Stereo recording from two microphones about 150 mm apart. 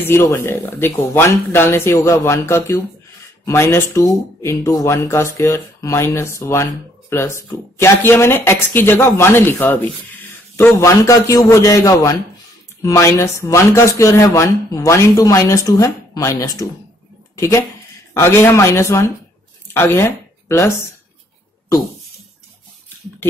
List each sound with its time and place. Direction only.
0.0 s speech: 15° left (ahead or behind)